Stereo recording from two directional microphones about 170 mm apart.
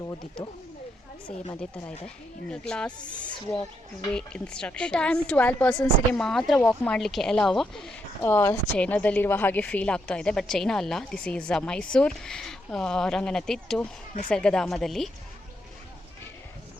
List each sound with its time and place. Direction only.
2.5 s a woman's voice: 5° left (ahead or behind)
4.1 s a woman's voice: 5° left (ahead or behind)